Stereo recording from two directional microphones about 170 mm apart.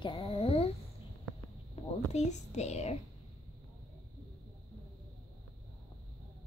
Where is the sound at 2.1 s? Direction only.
40° left (ahead or behind).